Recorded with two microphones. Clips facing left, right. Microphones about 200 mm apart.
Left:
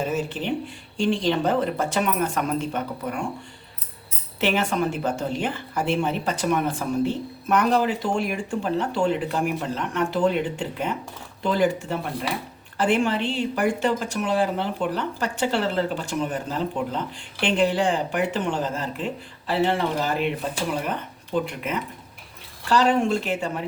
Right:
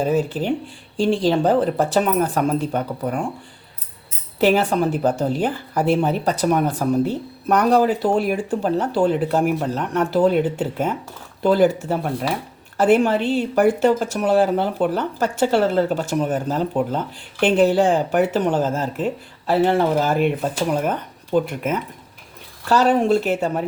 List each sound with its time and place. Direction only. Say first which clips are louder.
0.0 s a woman's voice: right 6 dB; 35° right (ahead or behind)
4.4 s a woman's voice: right 6 dB; 35° right (ahead or behind)
22.7 s a woman's voice: right 4 dB; 40° right (ahead or behind)